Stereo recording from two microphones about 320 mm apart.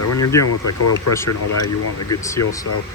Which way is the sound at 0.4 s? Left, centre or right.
Left.